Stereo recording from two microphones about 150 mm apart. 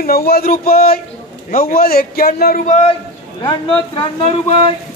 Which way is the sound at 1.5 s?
75° left (ahead or behind).